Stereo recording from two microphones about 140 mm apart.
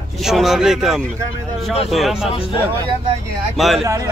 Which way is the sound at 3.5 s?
Centre (ahead or behind).